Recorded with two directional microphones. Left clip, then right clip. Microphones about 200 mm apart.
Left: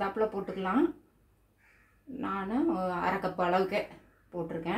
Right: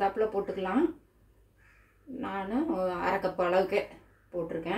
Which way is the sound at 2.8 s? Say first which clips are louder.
Right 2 dB; 20° left (ahead or behind).